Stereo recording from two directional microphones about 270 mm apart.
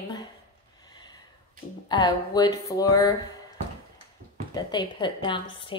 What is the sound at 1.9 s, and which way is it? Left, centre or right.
A woman's voice, centre.